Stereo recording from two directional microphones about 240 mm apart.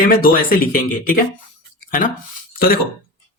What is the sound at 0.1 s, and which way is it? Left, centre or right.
Speech, left.